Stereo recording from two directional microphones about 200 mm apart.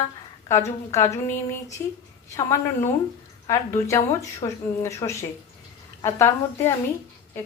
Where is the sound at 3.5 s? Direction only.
15° left (ahead or behind).